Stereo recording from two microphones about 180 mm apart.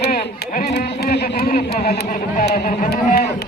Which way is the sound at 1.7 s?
60° left (ahead or behind).